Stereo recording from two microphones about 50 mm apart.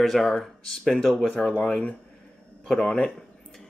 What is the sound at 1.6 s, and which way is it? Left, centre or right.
Speech, left.